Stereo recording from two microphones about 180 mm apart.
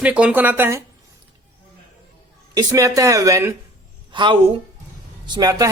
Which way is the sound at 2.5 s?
20° right (ahead or behind).